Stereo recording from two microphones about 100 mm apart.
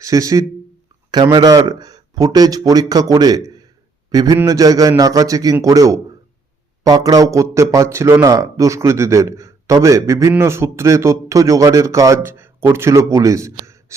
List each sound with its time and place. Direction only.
0.0 s a man's voice: 35° right (ahead or behind)
1.1 s a man's voice: 45° right (ahead or behind)